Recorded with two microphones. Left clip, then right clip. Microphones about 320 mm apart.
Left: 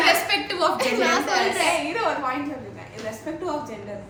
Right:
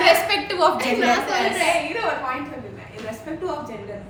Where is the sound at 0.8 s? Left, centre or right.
Centre.